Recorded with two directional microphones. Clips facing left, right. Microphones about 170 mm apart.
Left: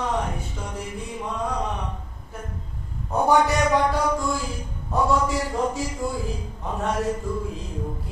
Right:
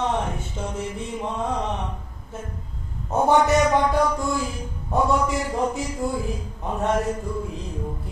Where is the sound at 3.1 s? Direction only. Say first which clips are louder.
Right 2 dB; 20° right (ahead or behind).